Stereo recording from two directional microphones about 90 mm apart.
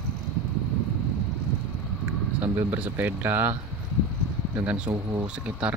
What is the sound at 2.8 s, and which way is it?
Speech, 20° right (ahead or behind).